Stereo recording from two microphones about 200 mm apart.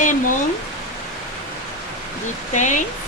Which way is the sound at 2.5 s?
40° left (ahead or behind).